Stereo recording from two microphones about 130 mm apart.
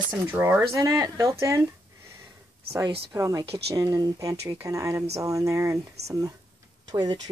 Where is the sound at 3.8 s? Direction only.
30° right (ahead or behind).